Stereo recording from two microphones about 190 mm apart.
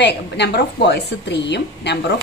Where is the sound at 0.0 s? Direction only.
60° left (ahead or behind).